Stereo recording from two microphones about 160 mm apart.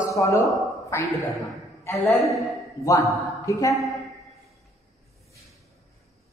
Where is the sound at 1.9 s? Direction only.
Centre (ahead or behind).